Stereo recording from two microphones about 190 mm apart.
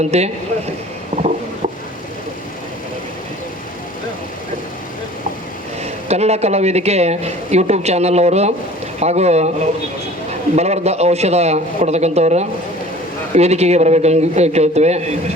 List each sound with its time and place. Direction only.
0.0 s speech: 35° right (ahead or behind)
1.1 s a sound: 35° right (ahead or behind)
5.8 s speech: 35° right (ahead or behind)
10.5 s speech: 35° right (ahead or behind)